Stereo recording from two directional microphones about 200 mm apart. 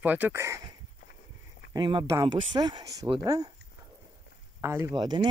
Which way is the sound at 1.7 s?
20° right (ahead or behind).